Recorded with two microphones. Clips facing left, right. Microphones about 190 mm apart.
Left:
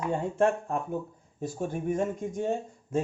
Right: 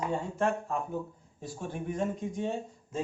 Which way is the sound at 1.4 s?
45° left (ahead or behind).